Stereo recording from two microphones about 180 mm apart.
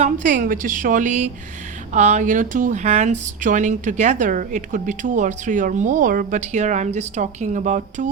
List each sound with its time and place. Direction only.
0.0 s speech: 45° right (ahead or behind)